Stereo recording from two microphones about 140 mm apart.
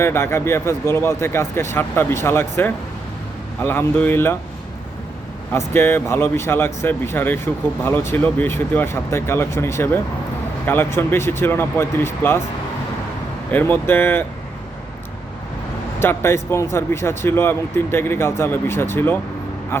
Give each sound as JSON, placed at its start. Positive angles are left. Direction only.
{"t": 0.0, "sound": "speech", "side_deg": 20}
{"t": 5.5, "sound": "speech", "side_deg": 15}
{"t": 13.5, "sound": "speech", "side_deg": 15}
{"t": 16.0, "sound": "speech", "side_deg": 15}